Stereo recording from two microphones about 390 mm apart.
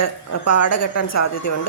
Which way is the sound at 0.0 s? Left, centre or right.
Left.